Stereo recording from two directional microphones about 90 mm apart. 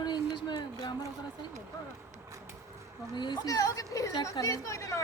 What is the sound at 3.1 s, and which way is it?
Speech, 55° left (ahead or behind).